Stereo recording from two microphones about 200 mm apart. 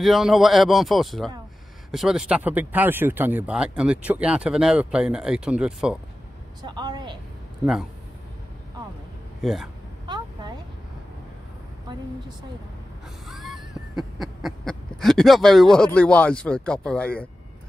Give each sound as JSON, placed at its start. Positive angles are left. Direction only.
{"t": 0.0, "sound": "speech", "side_deg": 0}
{"t": 6.6, "sound": "a woman's voice", "side_deg": -20}
{"t": 7.6, "sound": "speech", "side_deg": -5}
{"t": 9.4, "sound": "speech", "side_deg": 0}
{"t": 10.0, "sound": "a sound", "side_deg": -20}
{"t": 13.3, "sound": "a sound", "side_deg": 0}